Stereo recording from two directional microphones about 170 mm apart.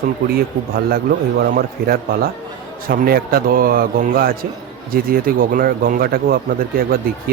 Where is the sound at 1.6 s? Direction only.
65° right (ahead or behind).